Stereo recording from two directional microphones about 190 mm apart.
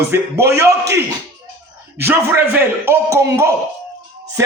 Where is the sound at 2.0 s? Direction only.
10° right (ahead or behind).